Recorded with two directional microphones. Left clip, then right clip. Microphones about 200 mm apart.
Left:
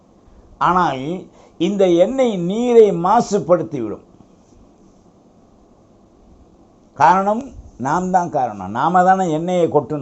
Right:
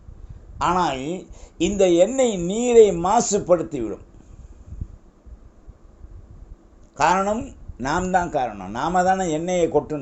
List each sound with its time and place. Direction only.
0.6 s speech: 30° right (ahead or behind)
6.9 s speech: 35° right (ahead or behind)
8.0 s speech: 25° right (ahead or behind)